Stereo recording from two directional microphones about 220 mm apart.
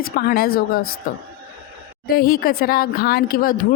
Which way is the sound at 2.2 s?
45° left (ahead or behind).